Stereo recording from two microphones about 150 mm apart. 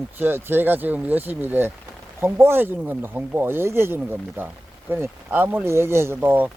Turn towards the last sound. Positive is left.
turn(degrees=-10)  # may be behind; listen again after turning